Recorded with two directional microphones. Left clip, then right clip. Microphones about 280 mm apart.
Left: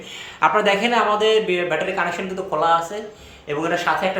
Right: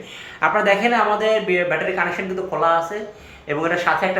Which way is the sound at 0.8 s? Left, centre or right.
Centre.